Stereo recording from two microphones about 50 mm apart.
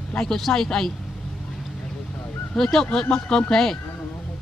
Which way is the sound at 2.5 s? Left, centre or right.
Centre.